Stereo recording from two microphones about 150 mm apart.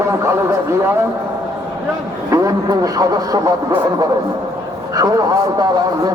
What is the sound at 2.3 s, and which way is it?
A man's voice, 20° right (ahead or behind).